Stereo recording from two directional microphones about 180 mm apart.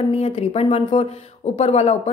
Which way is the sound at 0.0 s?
35° left (ahead or behind).